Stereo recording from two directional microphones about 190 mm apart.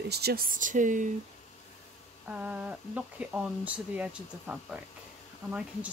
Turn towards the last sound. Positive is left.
turn(degrees=-5)  # may be behind; listen again after turning